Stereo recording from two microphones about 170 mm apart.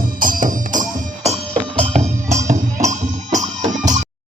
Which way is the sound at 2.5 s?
45° right (ahead or behind).